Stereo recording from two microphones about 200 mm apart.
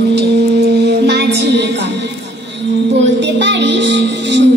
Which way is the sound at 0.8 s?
55° right (ahead or behind).